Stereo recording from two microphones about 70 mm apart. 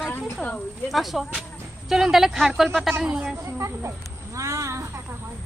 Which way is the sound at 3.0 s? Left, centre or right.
Centre.